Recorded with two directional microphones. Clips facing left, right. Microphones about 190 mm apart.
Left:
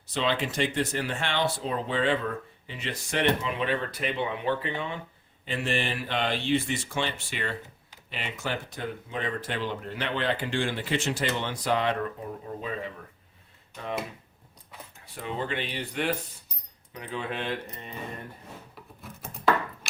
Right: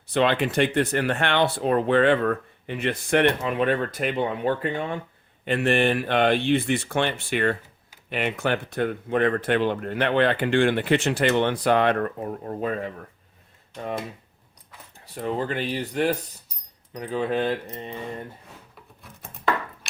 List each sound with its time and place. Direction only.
0.1 s speech: 60° right (ahead or behind)
5.5 s speech: 60° right (ahead or behind)
15.0 s speech: 40° right (ahead or behind)
19.0 s a sound: centre (ahead or behind)